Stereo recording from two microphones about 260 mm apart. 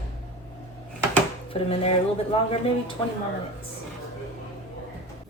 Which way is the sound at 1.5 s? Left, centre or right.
Left.